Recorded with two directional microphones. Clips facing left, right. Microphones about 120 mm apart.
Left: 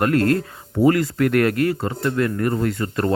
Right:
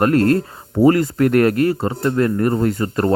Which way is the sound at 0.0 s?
35° right (ahead or behind).